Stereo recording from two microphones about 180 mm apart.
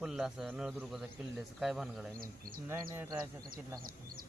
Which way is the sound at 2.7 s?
15° right (ahead or behind).